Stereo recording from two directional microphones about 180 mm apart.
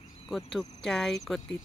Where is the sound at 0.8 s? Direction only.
5° left (ahead or behind).